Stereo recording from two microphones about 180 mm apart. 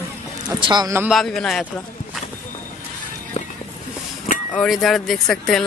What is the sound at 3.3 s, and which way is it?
Music, 35° left (ahead or behind).